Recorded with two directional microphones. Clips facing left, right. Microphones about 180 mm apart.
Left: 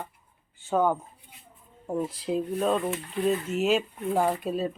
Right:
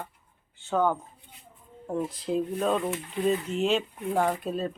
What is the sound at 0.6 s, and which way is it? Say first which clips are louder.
Speech: left 1 dB; 10° left (ahead or behind).